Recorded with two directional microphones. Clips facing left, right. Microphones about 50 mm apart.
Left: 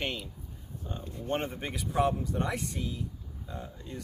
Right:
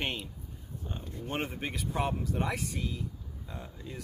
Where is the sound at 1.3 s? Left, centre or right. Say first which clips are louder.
Left 2 dB; centre.